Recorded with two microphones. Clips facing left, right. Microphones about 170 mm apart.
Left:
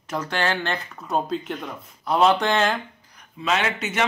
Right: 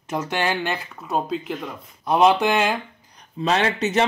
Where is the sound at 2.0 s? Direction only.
15° right (ahead or behind).